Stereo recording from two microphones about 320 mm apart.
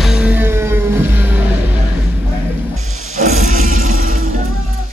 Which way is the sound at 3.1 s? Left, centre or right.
Right.